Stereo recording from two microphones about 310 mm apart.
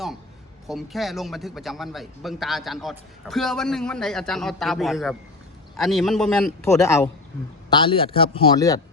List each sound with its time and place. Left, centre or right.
0.7 s a man's voice: centre